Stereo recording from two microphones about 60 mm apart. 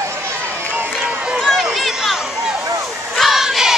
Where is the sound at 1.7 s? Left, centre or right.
Centre.